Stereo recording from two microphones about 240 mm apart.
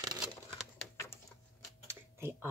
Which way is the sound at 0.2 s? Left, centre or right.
Centre.